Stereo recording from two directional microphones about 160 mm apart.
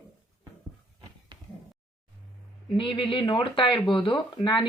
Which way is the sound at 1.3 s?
25° right (ahead or behind).